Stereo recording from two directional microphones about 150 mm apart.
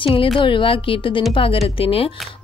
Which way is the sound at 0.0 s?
35° left (ahead or behind).